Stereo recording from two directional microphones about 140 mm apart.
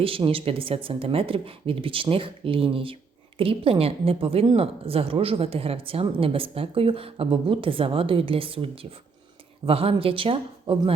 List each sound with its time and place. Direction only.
0.0 s speech: 40° right (ahead or behind)